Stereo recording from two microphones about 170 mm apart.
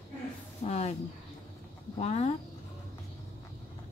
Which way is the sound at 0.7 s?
40° left (ahead or behind).